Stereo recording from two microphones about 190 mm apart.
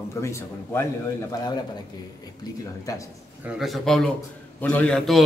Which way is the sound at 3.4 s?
Centre (ahead or behind).